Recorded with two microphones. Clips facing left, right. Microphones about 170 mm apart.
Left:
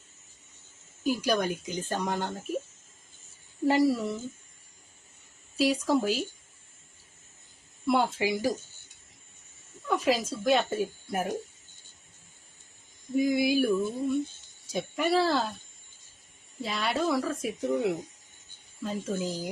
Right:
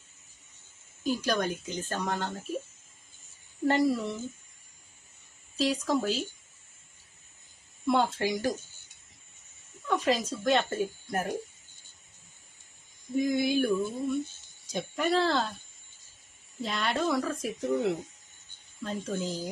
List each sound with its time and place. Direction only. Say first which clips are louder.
1.0 s a woman's voice: left 2 dB; 10° left (ahead or behind)
3.7 s speech: left 2 dB; 5° left (ahead or behind)
5.5 s a woman's voice: left 2 dB; 10° left (ahead or behind)
7.9 s a woman's voice: left 1 dB; 10° left (ahead or behind)
9.8 s a woman's voice: left 1 dB; 5° left (ahead or behind)
13.1 s a woman's voice: left 2 dB; 5° left (ahead or behind)
16.6 s a woman's voice: left 1 dB; centre (ahead or behind)